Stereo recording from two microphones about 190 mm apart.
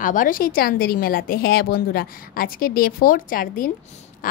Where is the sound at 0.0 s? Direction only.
45° left (ahead or behind).